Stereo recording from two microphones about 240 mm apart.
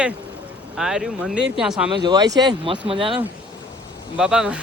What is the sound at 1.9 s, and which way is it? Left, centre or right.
Speech, centre.